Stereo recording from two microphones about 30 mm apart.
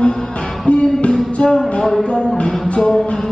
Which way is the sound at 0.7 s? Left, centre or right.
Left.